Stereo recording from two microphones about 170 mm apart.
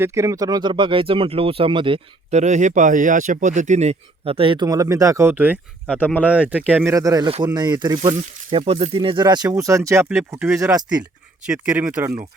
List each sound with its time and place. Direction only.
0.0 s speech: 15° right (ahead or behind)
6.0 s speech: 10° left (ahead or behind)
6.2 s speech: 10° right (ahead or behind)
10.8 s speech: 25° right (ahead or behind)
11.4 s speech: 5° right (ahead or behind)